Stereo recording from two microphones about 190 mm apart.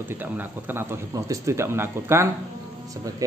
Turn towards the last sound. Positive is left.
turn(degrees=-15)  # may be behind; listen again after turning